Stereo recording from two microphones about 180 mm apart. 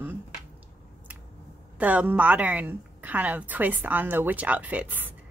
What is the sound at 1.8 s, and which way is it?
A woman's voice, 10° right (ahead or behind).